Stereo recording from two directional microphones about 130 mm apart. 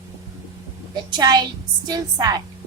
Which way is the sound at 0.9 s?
30° right (ahead or behind).